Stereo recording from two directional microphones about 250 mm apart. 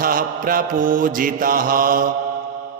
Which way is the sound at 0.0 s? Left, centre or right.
Right.